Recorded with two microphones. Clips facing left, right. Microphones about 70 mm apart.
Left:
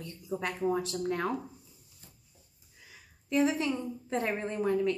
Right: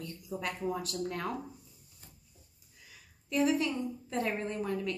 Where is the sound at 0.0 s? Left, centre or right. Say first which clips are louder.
Left 2 dB; left.